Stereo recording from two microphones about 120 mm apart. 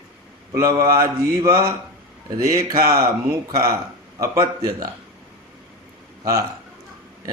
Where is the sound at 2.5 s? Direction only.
30° right (ahead or behind).